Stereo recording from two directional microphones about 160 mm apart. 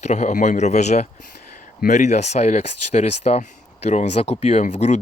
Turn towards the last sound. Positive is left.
turn(degrees=45)  # may be behind; listen again after turning